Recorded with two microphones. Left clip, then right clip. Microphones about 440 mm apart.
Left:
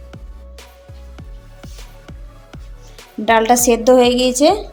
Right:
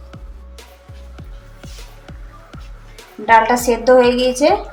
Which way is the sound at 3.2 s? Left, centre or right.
Left.